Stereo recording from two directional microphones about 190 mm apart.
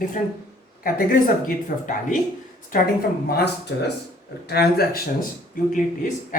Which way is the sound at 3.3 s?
60° left (ahead or behind).